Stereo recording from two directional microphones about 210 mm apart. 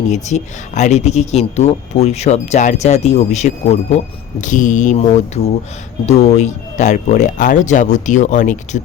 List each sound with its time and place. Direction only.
0.1 s speech: 35° left (ahead or behind)